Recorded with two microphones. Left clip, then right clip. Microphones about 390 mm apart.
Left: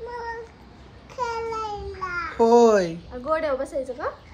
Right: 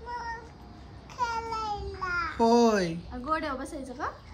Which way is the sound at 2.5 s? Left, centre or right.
Centre.